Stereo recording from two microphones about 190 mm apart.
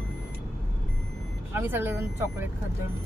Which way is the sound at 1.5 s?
10° right (ahead or behind).